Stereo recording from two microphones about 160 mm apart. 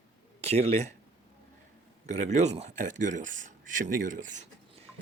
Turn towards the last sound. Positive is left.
turn(degrees=-55)  # may be behind; listen again after turning